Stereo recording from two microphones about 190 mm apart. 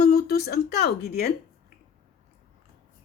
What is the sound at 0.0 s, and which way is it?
Speech, 55° left (ahead or behind).